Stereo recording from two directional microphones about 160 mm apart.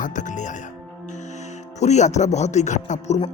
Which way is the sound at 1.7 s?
45° left (ahead or behind).